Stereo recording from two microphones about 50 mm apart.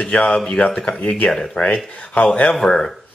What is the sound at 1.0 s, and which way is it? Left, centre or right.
Speech, left.